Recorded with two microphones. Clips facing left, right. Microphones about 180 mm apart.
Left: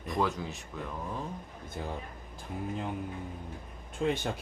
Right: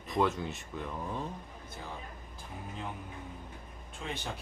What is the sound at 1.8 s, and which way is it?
Speech, 55° left (ahead or behind).